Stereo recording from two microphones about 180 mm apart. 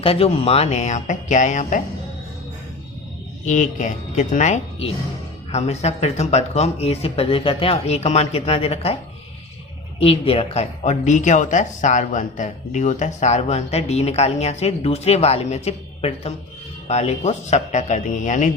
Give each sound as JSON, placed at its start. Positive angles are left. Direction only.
{"t": 0.0, "sound": "speech", "side_deg": 30}
{"t": 3.4, "sound": "speech", "side_deg": 45}
{"t": 10.0, "sound": "speech", "side_deg": 30}